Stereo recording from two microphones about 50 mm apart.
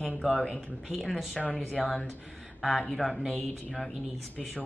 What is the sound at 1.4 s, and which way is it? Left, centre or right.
Speech, left.